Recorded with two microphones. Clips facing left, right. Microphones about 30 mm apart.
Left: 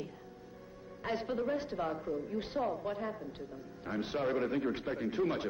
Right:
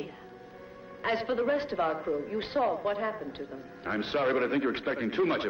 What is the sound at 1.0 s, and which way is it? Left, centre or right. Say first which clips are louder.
A man's voice: right 6 dB; right.